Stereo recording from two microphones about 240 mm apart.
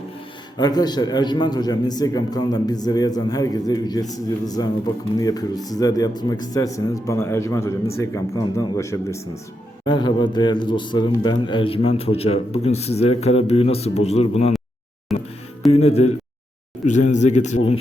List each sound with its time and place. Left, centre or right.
0.5 s a man's voice: centre
15.7 s a man's voice: left